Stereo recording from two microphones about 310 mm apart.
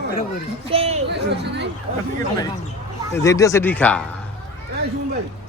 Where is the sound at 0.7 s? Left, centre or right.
Centre.